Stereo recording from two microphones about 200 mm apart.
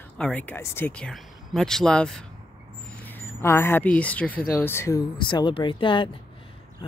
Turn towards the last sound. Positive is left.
turn(degrees=25)  # may be behind; listen again after turning